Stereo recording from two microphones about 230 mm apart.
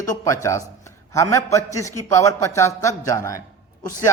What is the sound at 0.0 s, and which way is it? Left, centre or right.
A man's voice, centre.